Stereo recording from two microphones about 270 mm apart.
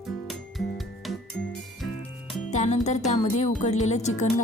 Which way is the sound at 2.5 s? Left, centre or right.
Left.